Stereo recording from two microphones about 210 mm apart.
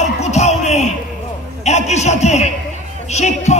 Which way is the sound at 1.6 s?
30° left (ahead or behind).